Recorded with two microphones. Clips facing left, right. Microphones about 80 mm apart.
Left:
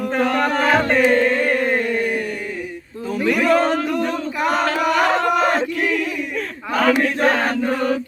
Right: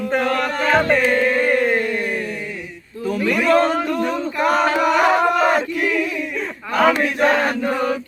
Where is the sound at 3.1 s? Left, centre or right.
Centre.